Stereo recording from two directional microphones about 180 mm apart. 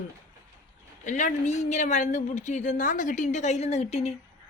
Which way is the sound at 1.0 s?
40° left (ahead or behind).